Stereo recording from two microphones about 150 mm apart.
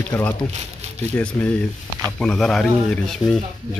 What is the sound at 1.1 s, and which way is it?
Speech, 15° left (ahead or behind).